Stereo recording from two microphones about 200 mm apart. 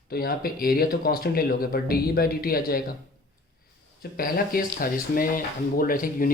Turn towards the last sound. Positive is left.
turn(degrees=45)  # may be behind; listen again after turning